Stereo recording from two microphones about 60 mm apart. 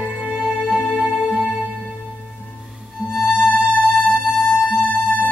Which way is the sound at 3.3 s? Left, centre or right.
Left.